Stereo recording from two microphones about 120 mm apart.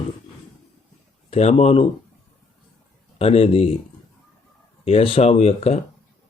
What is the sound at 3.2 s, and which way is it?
Speech, 55° left (ahead or behind).